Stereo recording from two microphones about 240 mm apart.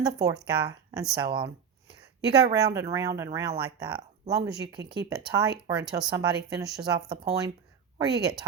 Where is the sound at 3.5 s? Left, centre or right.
Right.